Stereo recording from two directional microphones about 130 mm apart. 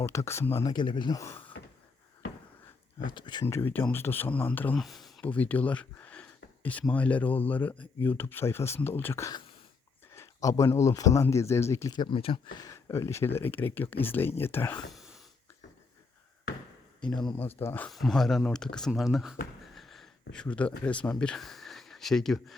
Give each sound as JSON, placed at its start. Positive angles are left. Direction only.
{"t": 0.0, "sound": "speech", "side_deg": 20}
{"t": 0.7, "sound": "speech", "side_deg": 35}
{"t": 3.1, "sound": "speech", "side_deg": 35}
{"t": 3.4, "sound": "speech", "side_deg": 15}
{"t": 4.8, "sound": "speech", "side_deg": 0}
{"t": 5.2, "sound": "speech", "side_deg": 10}
{"t": 11.9, "sound": "speech", "side_deg": 45}
{"t": 12.5, "sound": "speech", "side_deg": 25}
{"t": 14.8, "sound": "a sound", "side_deg": 0}
{"t": 17.2, "sound": "speech", "side_deg": 5}
{"t": 17.4, "sound": "speech", "side_deg": 15}
{"t": 17.8, "sound": "speech", "side_deg": 0}